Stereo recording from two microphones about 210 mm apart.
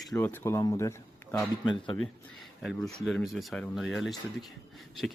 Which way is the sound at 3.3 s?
Centre (ahead or behind).